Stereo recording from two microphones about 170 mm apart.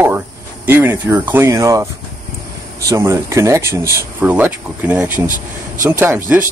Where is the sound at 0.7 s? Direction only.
15° right (ahead or behind).